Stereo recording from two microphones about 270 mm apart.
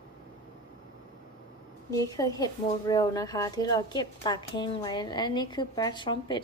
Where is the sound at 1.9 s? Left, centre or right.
Centre.